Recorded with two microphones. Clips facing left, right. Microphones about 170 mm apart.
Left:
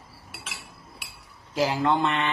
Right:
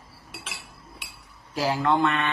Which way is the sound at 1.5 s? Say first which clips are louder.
Even; 20° left (ahead or behind).